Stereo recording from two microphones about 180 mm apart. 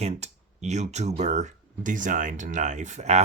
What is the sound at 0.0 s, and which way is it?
Speech, 40° right (ahead or behind).